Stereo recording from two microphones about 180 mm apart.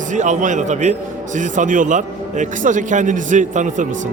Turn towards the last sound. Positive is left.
turn(degrees=-45)  # may be behind; listen again after turning